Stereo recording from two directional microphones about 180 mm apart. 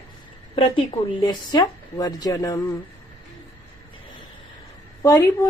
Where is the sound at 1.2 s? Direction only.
25° left (ahead or behind).